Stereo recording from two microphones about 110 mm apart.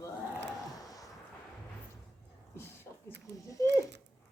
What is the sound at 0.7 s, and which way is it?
Vehicle, 35° left (ahead or behind).